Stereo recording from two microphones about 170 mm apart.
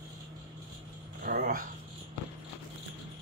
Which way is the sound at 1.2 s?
60° right (ahead or behind).